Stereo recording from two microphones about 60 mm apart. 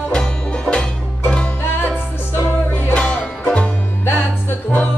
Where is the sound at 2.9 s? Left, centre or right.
Centre.